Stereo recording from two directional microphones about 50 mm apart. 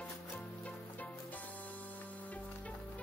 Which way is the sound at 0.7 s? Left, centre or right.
Left.